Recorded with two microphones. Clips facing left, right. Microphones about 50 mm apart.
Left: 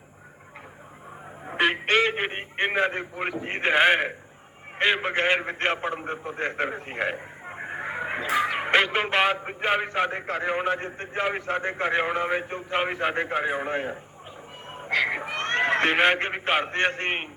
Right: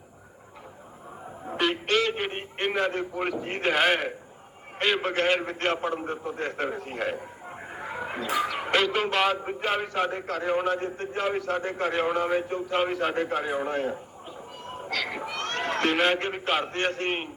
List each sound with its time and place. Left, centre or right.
1.5 s a man's voice: left